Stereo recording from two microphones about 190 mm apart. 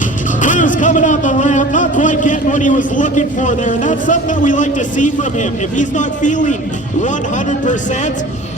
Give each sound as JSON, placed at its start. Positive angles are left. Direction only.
{"t": 0.4, "sound": "speech", "side_deg": 40}